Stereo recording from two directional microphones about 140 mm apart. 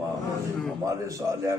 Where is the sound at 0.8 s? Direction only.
25° right (ahead or behind).